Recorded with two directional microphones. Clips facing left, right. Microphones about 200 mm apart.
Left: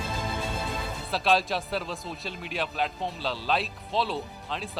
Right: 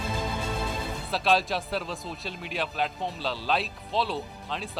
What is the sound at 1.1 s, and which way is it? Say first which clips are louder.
A man's voice: even; centre (ahead or behind).